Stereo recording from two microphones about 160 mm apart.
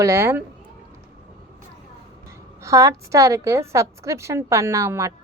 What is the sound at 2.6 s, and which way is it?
A woman's voice, 20° right (ahead or behind).